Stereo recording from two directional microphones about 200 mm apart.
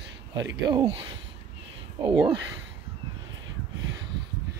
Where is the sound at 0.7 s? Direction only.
25° right (ahead or behind).